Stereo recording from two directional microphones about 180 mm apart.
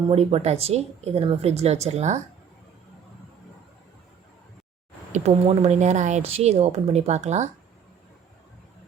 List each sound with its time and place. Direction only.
0.1 s speech: 35° right (ahead or behind)
5.1 s speech: 35° right (ahead or behind)